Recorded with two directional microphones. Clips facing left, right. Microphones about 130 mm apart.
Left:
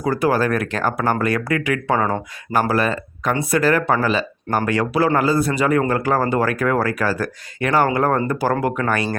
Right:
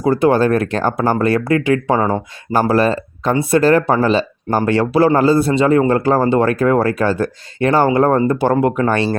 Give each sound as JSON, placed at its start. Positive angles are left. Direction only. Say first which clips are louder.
{"t": 0.0, "sound": "speech", "louder": "right 5 dB", "side_deg": -25}